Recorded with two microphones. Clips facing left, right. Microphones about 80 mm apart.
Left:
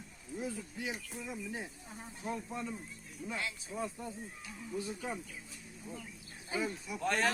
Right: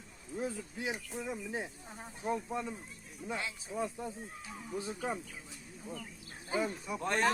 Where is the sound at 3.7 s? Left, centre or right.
Centre.